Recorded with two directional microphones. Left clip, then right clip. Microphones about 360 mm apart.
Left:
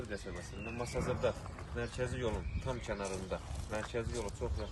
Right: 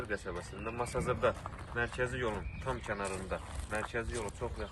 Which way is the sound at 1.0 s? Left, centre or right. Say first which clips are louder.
Right 3 dB; centre.